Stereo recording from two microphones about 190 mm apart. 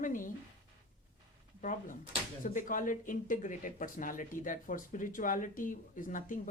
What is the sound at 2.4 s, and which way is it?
Speech, 45° left (ahead or behind).